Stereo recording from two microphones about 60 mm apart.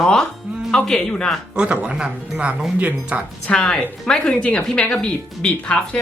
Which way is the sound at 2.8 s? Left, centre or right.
Right.